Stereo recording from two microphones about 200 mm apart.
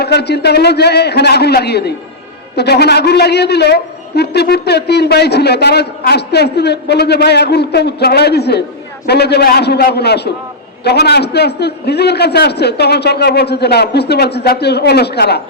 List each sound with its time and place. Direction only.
0.0 s a man's voice: 55° left (ahead or behind)